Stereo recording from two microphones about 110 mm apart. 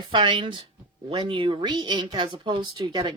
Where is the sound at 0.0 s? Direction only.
45° right (ahead or behind).